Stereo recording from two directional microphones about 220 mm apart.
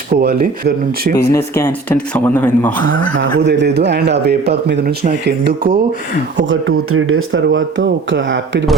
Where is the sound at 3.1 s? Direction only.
50° right (ahead or behind).